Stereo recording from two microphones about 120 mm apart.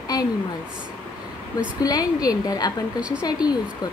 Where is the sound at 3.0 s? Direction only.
10° right (ahead or behind).